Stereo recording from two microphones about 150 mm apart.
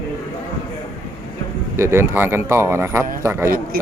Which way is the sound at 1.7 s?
15° right (ahead or behind).